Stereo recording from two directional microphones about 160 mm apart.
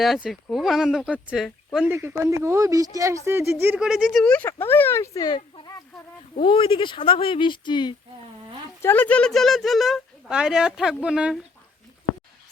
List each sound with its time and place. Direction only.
0.0 s speech: centre (ahead or behind)
1.9 s speech: 15° right (ahead or behind); by 7.9 s 30° left (ahead or behind)
8.8 s speech: 10° left (ahead or behind); by 11.3 s 5° right (ahead or behind)